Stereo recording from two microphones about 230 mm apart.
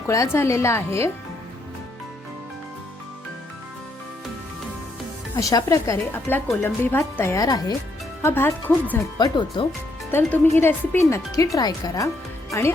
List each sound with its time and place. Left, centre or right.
0.1 s speech: centre
5.4 s speech: centre